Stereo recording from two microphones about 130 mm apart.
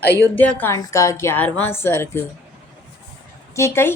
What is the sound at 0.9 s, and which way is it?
Speech, 25° left (ahead or behind).